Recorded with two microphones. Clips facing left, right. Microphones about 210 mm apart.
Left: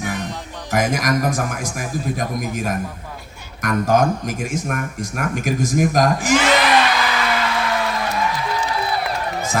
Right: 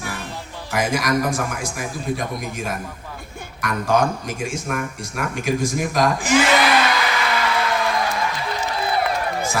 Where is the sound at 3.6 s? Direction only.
45° left (ahead or behind).